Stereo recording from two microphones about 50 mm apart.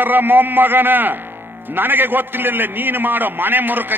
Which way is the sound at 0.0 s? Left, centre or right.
Right.